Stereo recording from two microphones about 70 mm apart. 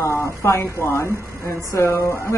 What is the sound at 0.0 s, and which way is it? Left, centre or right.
A woman's voice, left.